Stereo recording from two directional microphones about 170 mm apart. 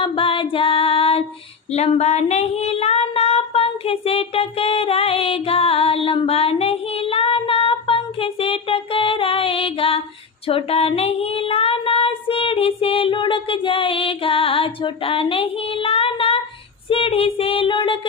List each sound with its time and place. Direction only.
0.0 s female singing: 30° left (ahead or behind)
1.7 s child singing: 40° left (ahead or behind)